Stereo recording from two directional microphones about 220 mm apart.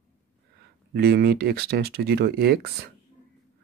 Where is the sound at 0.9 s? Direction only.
45° right (ahead or behind).